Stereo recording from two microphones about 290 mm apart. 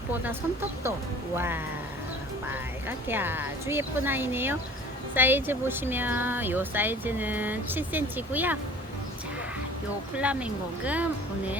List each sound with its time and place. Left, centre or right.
1.4 s speech: centre
10.2 s speech: centre